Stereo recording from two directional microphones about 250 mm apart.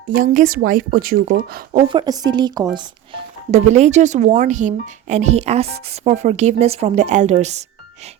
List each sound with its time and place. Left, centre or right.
0.1 s a woman's voice: right
1.9 s speech: centre